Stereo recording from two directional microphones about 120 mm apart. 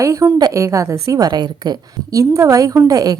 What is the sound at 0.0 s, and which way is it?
A woman's voice, 25° right (ahead or behind).